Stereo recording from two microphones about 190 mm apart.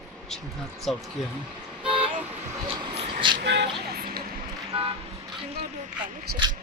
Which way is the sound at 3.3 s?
65° right (ahead or behind).